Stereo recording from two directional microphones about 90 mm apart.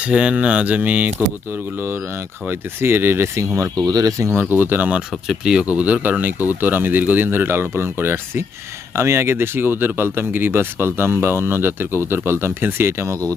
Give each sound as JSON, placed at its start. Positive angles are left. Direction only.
{"t": 0.0, "sound": "speech", "side_deg": -15}
{"t": 2.5, "sound": "speech", "side_deg": -25}
{"t": 3.8, "sound": "speech", "side_deg": -40}
{"t": 4.4, "sound": "speech", "side_deg": -20}